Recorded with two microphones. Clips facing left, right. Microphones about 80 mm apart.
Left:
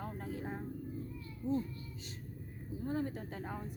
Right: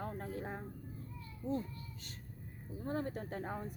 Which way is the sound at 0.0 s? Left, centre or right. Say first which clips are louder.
Even; right.